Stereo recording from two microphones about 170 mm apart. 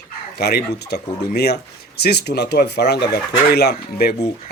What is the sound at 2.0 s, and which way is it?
Speech, 75° left (ahead or behind).